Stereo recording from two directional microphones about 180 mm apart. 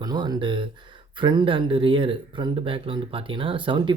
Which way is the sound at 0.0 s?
20° right (ahead or behind).